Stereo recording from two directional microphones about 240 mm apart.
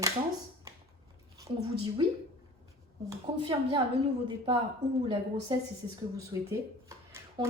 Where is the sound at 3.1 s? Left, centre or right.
Centre.